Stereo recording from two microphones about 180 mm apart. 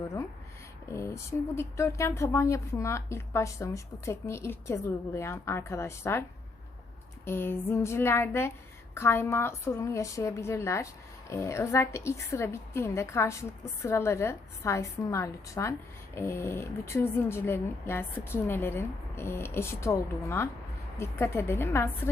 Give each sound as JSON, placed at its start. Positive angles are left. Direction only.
{"t": 0.9, "sound": "speech", "side_deg": 15}
{"t": 7.3, "sound": "speech", "side_deg": 15}